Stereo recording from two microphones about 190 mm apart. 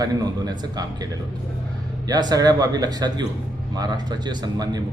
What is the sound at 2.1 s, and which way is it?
A man's voice, 20° right (ahead or behind).